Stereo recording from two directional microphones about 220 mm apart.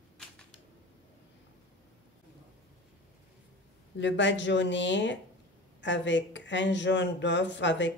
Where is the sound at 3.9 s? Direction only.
55° left (ahead or behind).